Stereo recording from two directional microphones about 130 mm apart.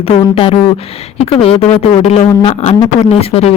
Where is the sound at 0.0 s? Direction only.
45° left (ahead or behind).